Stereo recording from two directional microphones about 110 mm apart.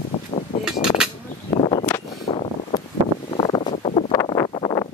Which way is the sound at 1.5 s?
55° left (ahead or behind).